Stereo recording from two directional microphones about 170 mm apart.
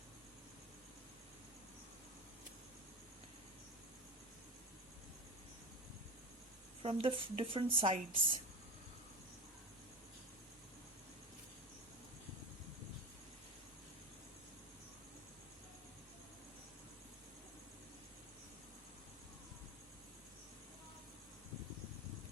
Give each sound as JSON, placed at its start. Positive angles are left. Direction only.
{"t": 6.8, "sound": "a woman's voice", "side_deg": -30}